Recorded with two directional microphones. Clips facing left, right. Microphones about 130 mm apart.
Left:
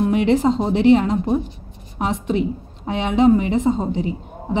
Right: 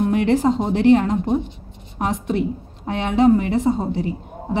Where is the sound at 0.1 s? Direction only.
15° left (ahead or behind).